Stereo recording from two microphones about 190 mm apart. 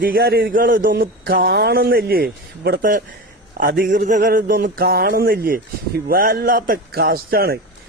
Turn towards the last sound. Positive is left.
turn(degrees=-55)  # may be behind; listen again after turning